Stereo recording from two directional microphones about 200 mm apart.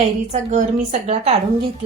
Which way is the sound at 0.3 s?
35° right (ahead or behind).